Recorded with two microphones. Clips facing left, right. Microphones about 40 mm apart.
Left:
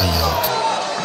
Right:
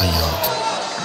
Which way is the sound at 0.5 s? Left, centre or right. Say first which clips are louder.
Left 3 dB; left.